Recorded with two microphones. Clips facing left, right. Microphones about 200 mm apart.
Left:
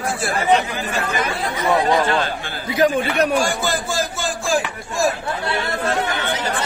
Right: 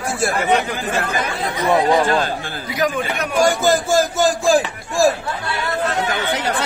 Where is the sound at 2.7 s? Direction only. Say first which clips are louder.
Left 4 dB; 30° left (ahead or behind).